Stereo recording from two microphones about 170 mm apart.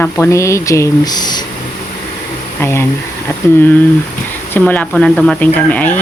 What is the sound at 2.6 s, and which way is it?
Speech, 15° left (ahead or behind).